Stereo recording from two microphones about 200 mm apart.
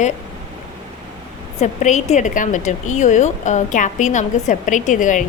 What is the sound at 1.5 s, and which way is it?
A woman's voice, 35° left (ahead or behind).